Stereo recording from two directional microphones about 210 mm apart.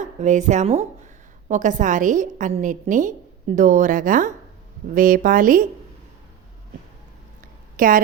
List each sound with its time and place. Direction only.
0.0 s a woman's voice: 35° right (ahead or behind)
7.8 s a woman's voice: 40° right (ahead or behind)